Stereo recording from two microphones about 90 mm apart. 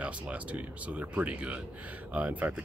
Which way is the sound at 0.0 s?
15° right (ahead or behind).